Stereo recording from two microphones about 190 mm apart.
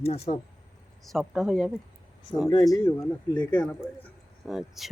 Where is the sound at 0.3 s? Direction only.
35° left (ahead or behind).